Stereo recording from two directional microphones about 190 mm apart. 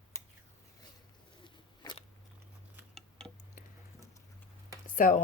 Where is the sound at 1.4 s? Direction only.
25° left (ahead or behind).